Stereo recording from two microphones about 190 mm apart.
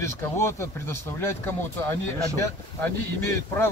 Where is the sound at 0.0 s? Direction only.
15° left (ahead or behind).